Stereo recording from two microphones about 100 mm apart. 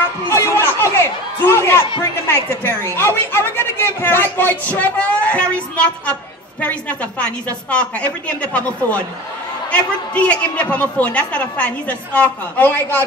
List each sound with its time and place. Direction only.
0.3 s chatter: 25° left (ahead or behind)
2.2 s a woman's voice: 25° left (ahead or behind)